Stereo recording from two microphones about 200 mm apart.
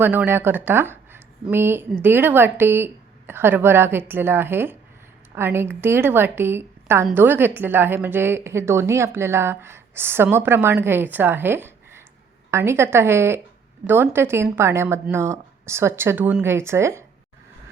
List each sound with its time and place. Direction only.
0.0 s a woman's voice: 10° right (ahead or behind)